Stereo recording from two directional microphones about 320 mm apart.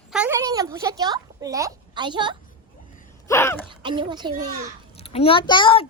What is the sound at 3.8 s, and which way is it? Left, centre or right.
Speech, centre.